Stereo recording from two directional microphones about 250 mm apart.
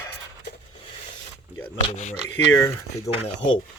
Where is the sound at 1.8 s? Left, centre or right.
Left.